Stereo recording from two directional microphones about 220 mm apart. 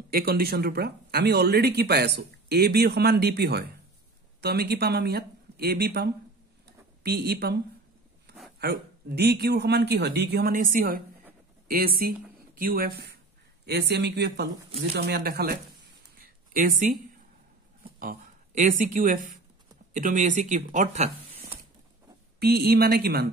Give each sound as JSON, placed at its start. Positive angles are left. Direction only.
{"t": 0.1, "sound": "speech", "side_deg": -45}
{"t": 22.4, "sound": "speech", "side_deg": -45}